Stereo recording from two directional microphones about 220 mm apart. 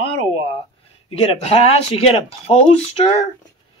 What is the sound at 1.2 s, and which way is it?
Speech, 25° left (ahead or behind).